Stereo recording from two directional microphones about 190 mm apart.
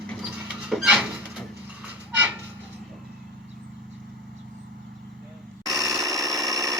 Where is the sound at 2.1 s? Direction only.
10° right (ahead or behind).